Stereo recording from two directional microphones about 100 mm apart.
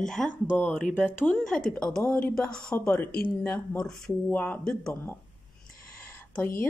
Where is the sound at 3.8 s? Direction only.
5° left (ahead or behind).